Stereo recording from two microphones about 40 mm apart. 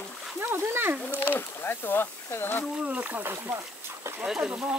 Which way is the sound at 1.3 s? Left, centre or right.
Left.